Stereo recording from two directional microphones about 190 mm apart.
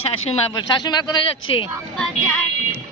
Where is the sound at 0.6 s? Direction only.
20° left (ahead or behind).